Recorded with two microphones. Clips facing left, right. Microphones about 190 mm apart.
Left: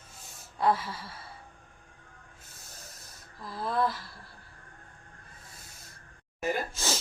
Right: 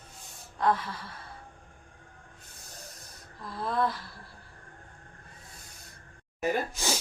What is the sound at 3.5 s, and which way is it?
Neigh, centre (ahead or behind).